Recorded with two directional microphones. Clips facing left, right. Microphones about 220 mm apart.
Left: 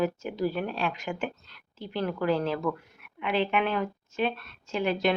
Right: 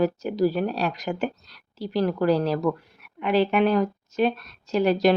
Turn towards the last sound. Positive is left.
turn(degrees=-40)  # may be behind; listen again after turning